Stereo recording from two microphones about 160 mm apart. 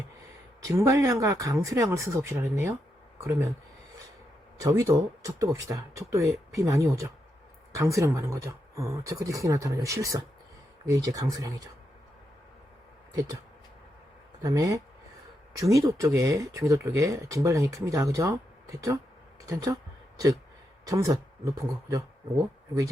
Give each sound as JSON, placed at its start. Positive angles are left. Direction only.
{"t": 0.6, "sound": "speech", "side_deg": -15}
{"t": 4.5, "sound": "speech", "side_deg": -20}
{"t": 14.4, "sound": "speech", "side_deg": -20}
{"t": 19.5, "sound": "speech", "side_deg": -25}